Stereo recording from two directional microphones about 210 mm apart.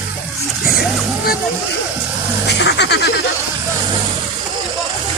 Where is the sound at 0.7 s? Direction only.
45° left (ahead or behind).